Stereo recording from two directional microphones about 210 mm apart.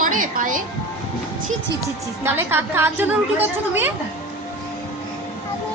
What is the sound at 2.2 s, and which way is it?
A woman's voice, 10° right (ahead or behind).